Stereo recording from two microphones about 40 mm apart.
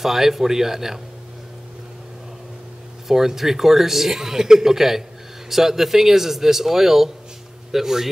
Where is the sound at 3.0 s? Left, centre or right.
Centre.